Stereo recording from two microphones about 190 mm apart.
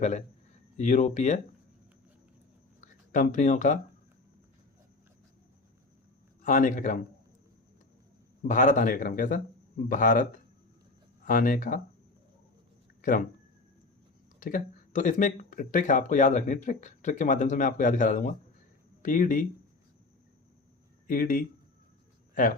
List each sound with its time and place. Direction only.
0.0 s speech: 40° left (ahead or behind)
2.8 s speech: 40° left (ahead or behind)
6.4 s speech: 40° left (ahead or behind)
8.4 s speech: 45° left (ahead or behind)
11.3 s speech: 45° left (ahead or behind)
13.0 s speech: 45° left (ahead or behind)
14.3 s speech: 45° left (ahead or behind)
21.1 s speech: 50° left (ahead or behind)